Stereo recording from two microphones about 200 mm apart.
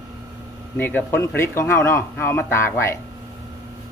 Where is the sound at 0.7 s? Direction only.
10° left (ahead or behind).